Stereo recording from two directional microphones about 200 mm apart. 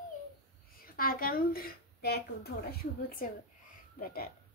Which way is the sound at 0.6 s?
45° left (ahead or behind).